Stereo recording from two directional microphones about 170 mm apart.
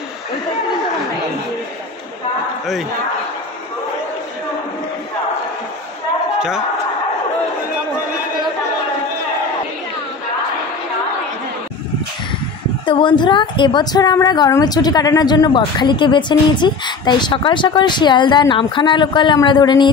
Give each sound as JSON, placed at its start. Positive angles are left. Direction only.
{"t": 2.6, "sound": "a man's voice", "side_deg": 0}
{"t": 12.8, "sound": "a woman's voice", "side_deg": 30}